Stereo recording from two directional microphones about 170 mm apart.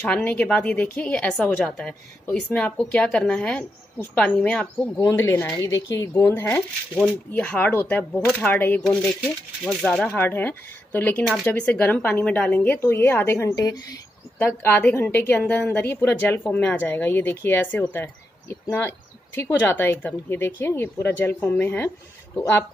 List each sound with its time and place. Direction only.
0.0 s speech: 10° left (ahead or behind)
5.0 s speech: 15° left (ahead or behind)